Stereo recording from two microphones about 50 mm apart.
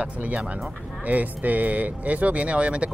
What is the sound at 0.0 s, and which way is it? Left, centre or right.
Speech, right.